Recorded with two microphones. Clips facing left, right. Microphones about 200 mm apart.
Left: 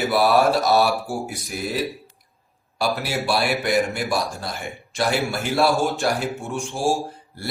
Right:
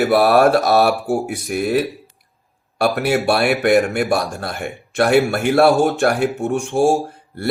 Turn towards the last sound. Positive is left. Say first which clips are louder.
# right 10 dB
turn(degrees=-60)  # may be behind; listen again after turning